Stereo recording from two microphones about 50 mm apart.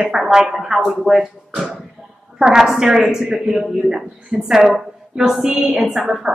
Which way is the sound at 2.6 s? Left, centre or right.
Centre.